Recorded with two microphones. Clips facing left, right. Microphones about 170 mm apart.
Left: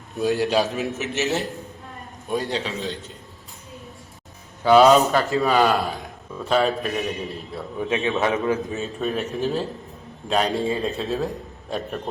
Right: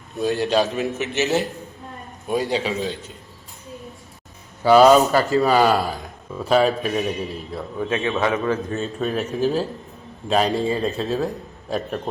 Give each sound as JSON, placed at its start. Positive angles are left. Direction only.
{"t": 0.3, "sound": "a man's voice", "side_deg": 5}
{"t": 4.6, "sound": "a man's voice", "side_deg": -5}
{"t": 7.8, "sound": "a man's voice", "side_deg": 20}
{"t": 8.6, "sound": "a man's voice", "side_deg": 0}